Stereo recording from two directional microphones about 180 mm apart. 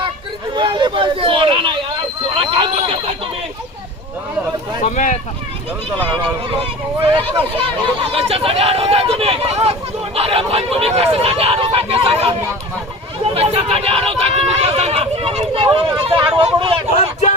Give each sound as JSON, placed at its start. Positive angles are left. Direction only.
{"t": 0.5, "sound": "speech", "side_deg": -25}
{"t": 4.8, "sound": "speech", "side_deg": 45}
{"t": 7.0, "sound": "speech", "side_deg": -30}